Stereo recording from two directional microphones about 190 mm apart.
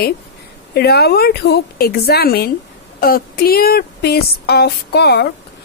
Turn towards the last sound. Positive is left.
turn(degrees=60)  # may be behind; listen again after turning